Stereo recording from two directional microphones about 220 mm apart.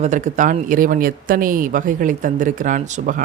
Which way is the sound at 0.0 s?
35° right (ahead or behind).